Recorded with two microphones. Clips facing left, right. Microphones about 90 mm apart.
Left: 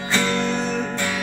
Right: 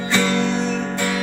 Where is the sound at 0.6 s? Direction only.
5° left (ahead or behind).